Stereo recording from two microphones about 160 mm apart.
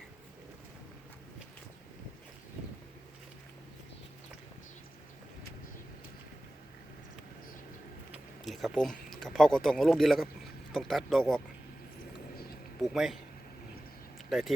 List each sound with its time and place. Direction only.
8.1 s a sound: centre (ahead or behind)
10.7 s speech: centre (ahead or behind)
12.8 s speech: centre (ahead or behind)
14.3 s speech: centre (ahead or behind)